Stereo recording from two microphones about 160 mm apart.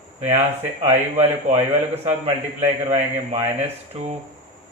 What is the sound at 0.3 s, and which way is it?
A man's voice, 45° right (ahead or behind).